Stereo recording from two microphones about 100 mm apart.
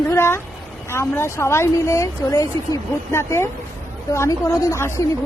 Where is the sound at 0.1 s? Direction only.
25° left (ahead or behind).